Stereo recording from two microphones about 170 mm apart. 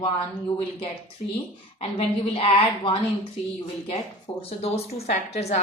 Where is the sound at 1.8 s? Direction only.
35° left (ahead or behind).